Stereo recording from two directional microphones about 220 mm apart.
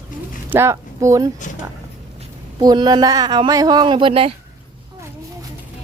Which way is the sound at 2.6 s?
20° right (ahead or behind).